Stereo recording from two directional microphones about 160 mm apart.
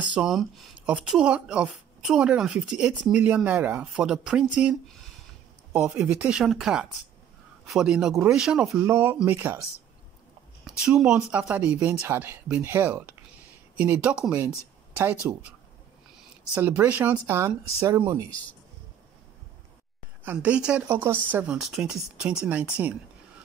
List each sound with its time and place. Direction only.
0.0 s speech: 5° right (ahead or behind)
10.6 s speech: 5° right (ahead or behind)
16.5 s speech: 10° right (ahead or behind)
20.2 s speech: 5° right (ahead or behind)